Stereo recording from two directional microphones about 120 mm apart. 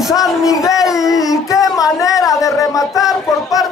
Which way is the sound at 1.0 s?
30° left (ahead or behind).